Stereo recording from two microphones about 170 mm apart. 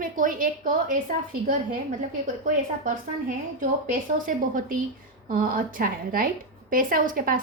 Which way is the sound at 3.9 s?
50° right (ahead or behind).